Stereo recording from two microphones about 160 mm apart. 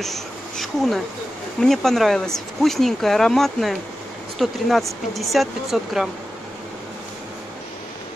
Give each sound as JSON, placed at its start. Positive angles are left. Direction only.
{"t": 0.0, "sound": "insect", "side_deg": 0}
{"t": 1.6, "sound": "speech", "side_deg": 0}